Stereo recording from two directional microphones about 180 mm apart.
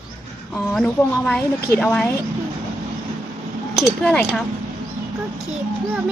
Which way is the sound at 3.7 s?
Centre (ahead or behind).